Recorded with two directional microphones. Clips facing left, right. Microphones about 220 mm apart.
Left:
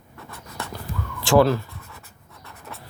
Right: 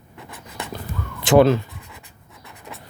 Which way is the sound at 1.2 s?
20° right (ahead or behind).